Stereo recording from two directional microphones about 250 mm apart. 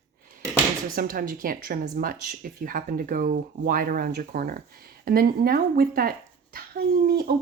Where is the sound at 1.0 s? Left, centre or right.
Right.